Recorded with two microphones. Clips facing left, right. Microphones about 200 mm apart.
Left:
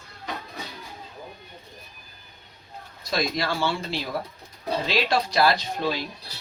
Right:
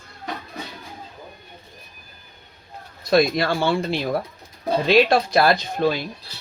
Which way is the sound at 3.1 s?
55° right (ahead or behind).